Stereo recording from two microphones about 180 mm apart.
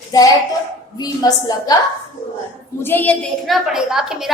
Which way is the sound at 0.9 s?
20° left (ahead or behind).